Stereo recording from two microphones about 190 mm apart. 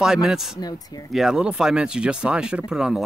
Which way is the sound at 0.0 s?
5° right (ahead or behind).